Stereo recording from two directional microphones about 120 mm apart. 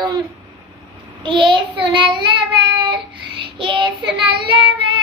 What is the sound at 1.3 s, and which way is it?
Child singing, 45° right (ahead or behind).